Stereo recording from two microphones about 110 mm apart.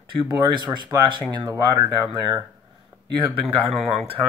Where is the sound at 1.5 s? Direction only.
30° right (ahead or behind).